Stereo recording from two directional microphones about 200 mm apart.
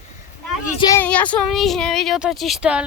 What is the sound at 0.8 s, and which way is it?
Speech, 15° left (ahead or behind).